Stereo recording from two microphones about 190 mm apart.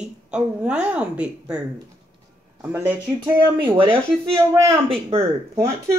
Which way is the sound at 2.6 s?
10° right (ahead or behind).